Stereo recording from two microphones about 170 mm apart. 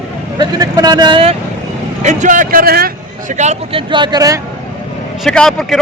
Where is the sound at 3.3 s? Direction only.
45° right (ahead or behind).